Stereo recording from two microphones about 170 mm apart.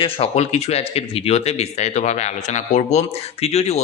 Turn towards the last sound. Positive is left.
turn(degrees=35)  # may be behind; listen again after turning